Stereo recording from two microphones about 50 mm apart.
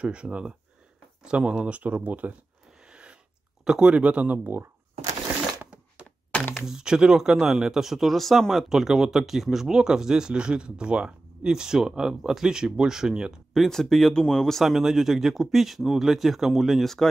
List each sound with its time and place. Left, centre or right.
0.0 s speech: right
2.9 s a sound: right
3.6 s speech: centre
3.9 s speech: right
6.5 s speech: centre
8.6 s speech: centre
13.5 s speech: centre
14.6 s speech: centre